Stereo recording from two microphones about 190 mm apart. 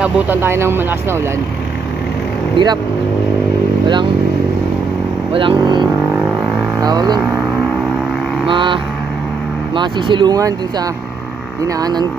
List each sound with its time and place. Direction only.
0.0 s speech: 10° right (ahead or behind)
2.5 s speech: 20° right (ahead or behind)
3.8 s speech: 25° right (ahead or behind)
5.3 s speech: 30° right (ahead or behind)
8.5 s speech: 25° right (ahead or behind)
9.8 s speech: 25° right (ahead or behind)
11.6 s speech: 20° right (ahead or behind)